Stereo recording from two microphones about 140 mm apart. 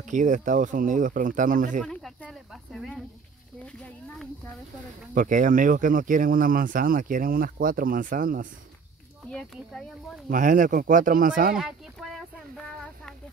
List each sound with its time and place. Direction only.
0.0 s speech: 65° right (ahead or behind)
1.8 s speech: centre (ahead or behind)
5.1 s speech: 70° right (ahead or behind)
9.3 s speech: 5° left (ahead or behind)
10.3 s speech: 70° right (ahead or behind)
11.5 s speech: 5° right (ahead or behind)